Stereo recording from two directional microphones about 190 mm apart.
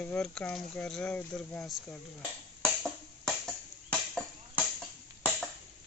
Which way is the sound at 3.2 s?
5° left (ahead or behind).